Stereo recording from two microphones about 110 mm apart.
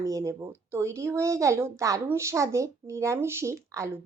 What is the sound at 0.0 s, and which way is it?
Speech, 30° right (ahead or behind).